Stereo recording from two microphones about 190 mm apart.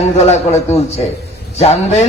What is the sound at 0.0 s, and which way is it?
A man's voice, 35° left (ahead or behind).